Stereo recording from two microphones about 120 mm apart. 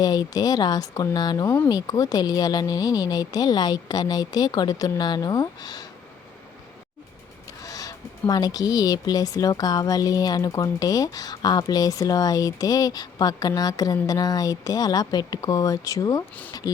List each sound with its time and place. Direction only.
0.0 s speech: 35° left (ahead or behind)
7.6 s speech: 30° left (ahead or behind)